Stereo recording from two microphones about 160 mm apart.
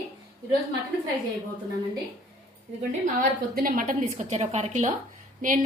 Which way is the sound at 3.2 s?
60° right (ahead or behind).